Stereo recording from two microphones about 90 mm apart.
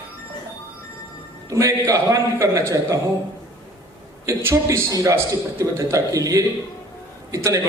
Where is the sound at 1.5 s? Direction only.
35° right (ahead or behind).